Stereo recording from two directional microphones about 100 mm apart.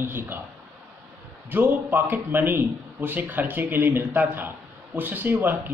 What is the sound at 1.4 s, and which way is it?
A man's voice, 20° right (ahead or behind).